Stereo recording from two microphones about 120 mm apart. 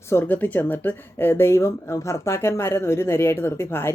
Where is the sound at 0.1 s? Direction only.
15° left (ahead or behind).